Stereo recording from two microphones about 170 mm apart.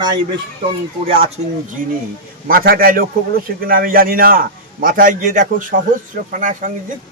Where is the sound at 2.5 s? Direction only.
60° right (ahead or behind).